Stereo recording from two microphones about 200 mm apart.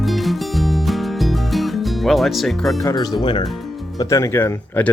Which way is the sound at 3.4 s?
Centre (ahead or behind).